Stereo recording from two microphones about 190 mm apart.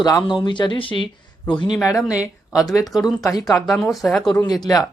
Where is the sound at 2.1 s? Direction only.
5° right (ahead or behind).